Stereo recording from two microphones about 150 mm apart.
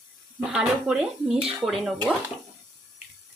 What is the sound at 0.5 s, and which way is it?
Speech, 5° right (ahead or behind).